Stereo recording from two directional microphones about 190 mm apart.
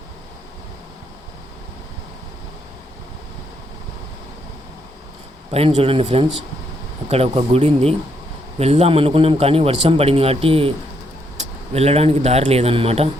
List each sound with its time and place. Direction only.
5.5 s a man's voice: 30° right (ahead or behind)